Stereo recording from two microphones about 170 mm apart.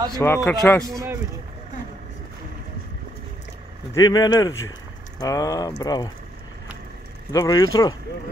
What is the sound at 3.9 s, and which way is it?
Speech, 20° left (ahead or behind).